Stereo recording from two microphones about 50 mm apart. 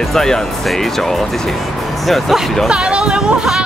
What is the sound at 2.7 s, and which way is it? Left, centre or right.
Speech, centre.